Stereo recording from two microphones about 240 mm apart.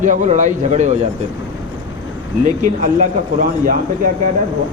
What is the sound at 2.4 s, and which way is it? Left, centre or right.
A man's voice, right.